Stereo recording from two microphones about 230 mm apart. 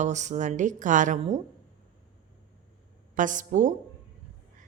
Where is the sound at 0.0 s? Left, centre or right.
Right.